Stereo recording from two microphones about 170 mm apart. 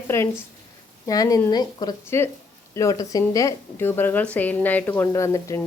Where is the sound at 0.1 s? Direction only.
15° left (ahead or behind).